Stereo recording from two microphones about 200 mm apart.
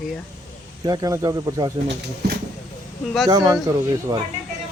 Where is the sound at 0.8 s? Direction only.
20° right (ahead or behind).